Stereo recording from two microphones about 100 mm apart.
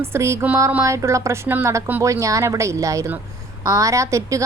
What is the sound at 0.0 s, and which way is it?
A woman's voice, 25° right (ahead or behind).